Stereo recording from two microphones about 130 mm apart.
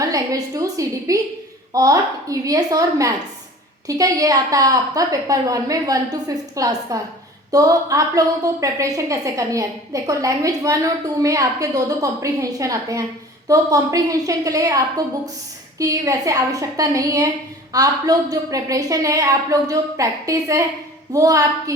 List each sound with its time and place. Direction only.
0.0 s a woman's voice: 25° right (ahead or behind)